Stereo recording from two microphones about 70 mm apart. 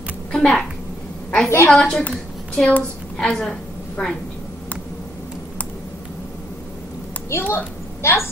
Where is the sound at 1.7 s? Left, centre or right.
Centre.